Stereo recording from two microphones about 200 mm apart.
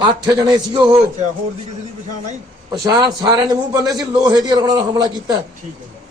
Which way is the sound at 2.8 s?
20° right (ahead or behind).